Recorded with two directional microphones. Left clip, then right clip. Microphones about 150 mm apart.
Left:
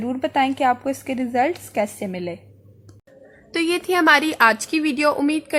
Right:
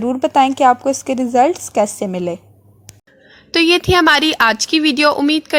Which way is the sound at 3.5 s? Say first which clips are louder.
Right 8 dB; 40° right (ahead or behind).